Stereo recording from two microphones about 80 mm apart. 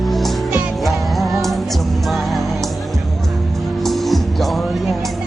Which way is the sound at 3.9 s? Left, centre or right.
Centre.